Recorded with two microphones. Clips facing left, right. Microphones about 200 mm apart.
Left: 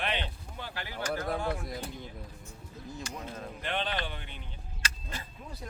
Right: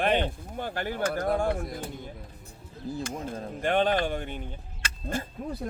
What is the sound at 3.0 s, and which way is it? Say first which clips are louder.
Speech: right 4 dB; 45° right (ahead or behind).